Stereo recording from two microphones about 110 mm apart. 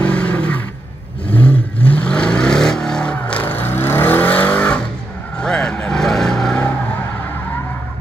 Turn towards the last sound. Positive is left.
turn(degrees=5)  # may be behind; listen again after turning